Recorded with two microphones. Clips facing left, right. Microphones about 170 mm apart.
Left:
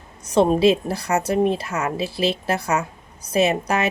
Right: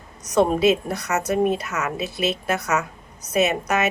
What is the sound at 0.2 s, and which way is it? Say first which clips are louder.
A woman's voice: left 2 dB; 30° left (ahead or behind).